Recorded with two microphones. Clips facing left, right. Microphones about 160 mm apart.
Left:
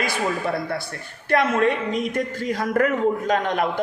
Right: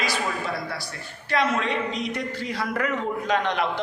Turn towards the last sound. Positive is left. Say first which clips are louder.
# left 2 dB
turn(degrees=50)  # may be behind; listen again after turning